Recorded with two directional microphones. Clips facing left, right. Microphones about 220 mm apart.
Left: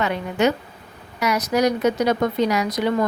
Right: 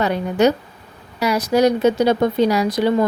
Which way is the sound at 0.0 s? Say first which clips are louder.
Right 4 dB; 35° right (ahead or behind).